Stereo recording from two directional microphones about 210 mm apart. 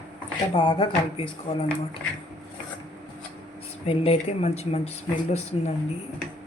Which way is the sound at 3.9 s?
30° left (ahead or behind).